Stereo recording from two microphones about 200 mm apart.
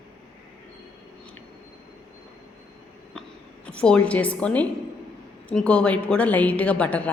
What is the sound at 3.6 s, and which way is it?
A woman's voice, 5° left (ahead or behind).